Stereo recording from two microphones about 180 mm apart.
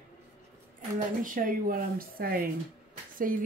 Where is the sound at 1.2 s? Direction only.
50° right (ahead or behind).